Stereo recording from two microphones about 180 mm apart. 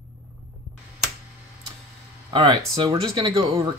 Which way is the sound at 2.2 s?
25° right (ahead or behind).